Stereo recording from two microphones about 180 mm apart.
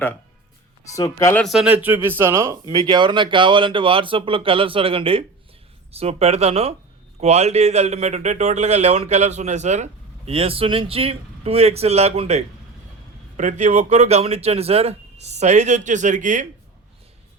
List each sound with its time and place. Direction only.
0.9 s speech: 15° left (ahead or behind)
1.5 s speech: 5° right (ahead or behind); by 16.5 s 45° right (ahead or behind)